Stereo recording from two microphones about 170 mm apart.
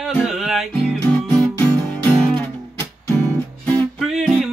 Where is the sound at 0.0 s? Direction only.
5° right (ahead or behind).